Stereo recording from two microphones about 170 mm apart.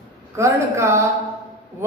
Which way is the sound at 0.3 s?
15° right (ahead or behind).